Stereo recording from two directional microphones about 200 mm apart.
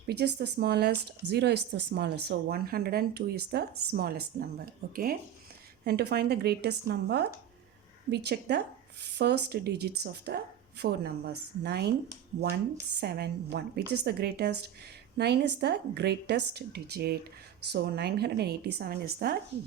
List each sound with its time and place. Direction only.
0.1 s a woman's voice: 55° right (ahead or behind)
13.0 s a woman's voice: 55° right (ahead or behind)